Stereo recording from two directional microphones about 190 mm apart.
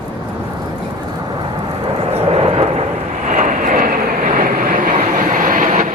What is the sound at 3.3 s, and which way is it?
Vehicle, 45° right (ahead or behind).